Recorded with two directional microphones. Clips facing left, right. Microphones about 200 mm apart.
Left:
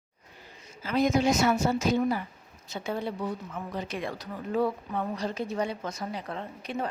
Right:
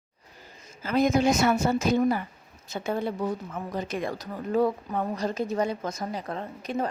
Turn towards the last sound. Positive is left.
turn(degrees=-40)  # may be behind; listen again after turning